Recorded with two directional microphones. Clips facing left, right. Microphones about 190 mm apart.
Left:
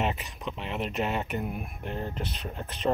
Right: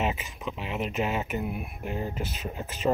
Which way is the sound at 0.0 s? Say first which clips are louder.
Right 1 dB; centre (ahead or behind).